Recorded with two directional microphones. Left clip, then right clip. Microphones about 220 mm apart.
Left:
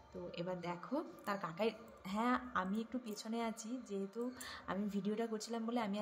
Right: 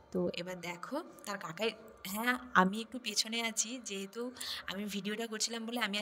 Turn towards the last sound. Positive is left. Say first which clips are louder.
# right 4 dB
turn(degrees=-40)  # may be behind; listen again after turning